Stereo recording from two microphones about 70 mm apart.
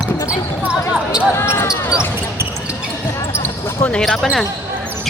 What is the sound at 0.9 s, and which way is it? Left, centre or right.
Basketball bounce, centre.